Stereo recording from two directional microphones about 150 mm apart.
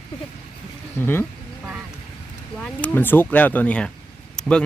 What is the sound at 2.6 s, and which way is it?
Speech, 10° left (ahead or behind).